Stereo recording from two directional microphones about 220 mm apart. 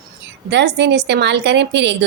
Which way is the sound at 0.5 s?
50° right (ahead or behind).